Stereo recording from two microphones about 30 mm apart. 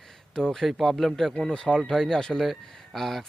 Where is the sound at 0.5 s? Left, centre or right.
Centre.